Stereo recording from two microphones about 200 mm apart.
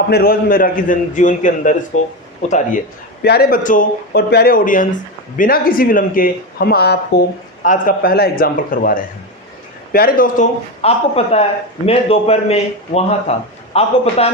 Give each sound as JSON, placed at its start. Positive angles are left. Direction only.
{"t": 0.1, "sound": "a man's voice", "side_deg": 50}
{"t": 3.2, "sound": "a man's voice", "side_deg": 50}